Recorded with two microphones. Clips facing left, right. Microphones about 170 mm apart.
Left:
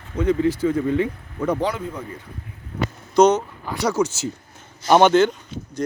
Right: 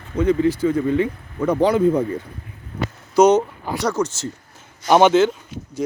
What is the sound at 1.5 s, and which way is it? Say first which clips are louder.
Speech: right 8 dB; 40° right (ahead or behind).